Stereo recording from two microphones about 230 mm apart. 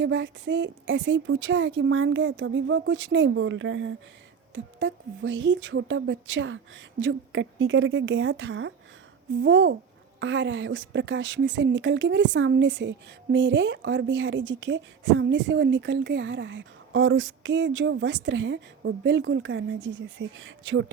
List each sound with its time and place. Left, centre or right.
0.0 s speech: right